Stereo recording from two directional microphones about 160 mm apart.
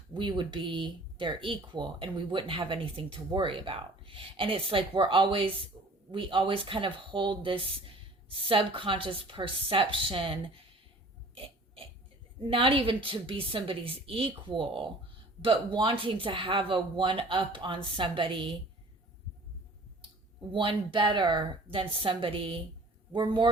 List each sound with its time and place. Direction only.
0.1 s speech: 30° right (ahead or behind)
11.3 s burping: 35° right (ahead or behind)
12.5 s speech: 35° right (ahead or behind)
20.5 s a man's voice: 30° right (ahead or behind)